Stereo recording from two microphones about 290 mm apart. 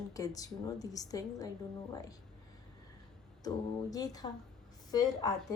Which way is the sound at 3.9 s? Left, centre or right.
Centre.